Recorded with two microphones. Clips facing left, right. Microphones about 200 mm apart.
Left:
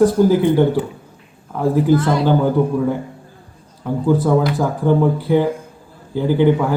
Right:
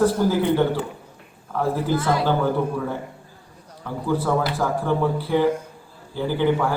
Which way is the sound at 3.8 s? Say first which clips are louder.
Left 7 dB; 15° left (ahead or behind).